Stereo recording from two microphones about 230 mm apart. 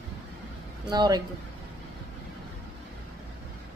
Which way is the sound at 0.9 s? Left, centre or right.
Centre.